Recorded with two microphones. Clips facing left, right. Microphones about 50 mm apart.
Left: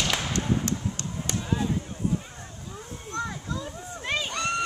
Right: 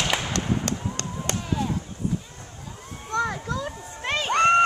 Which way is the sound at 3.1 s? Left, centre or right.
Right.